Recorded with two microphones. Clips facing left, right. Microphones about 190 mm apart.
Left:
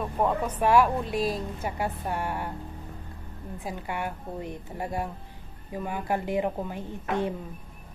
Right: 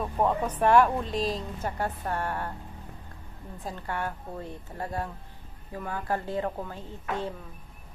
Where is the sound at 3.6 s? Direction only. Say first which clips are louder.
Even; 15° left (ahead or behind).